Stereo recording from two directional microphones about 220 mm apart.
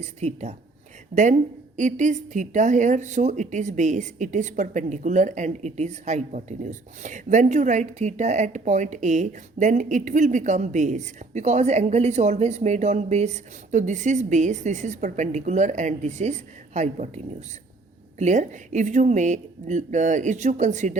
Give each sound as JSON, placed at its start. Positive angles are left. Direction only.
{"t": 0.0, "sound": "a woman's voice", "side_deg": -30}
{"t": 18.2, "sound": "a woman's voice", "side_deg": -35}